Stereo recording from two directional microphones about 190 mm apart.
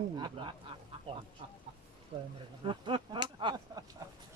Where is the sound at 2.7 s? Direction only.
25° right (ahead or behind).